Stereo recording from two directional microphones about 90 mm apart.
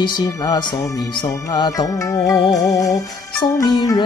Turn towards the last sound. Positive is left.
turn(degrees=45)  # may be behind; listen again after turning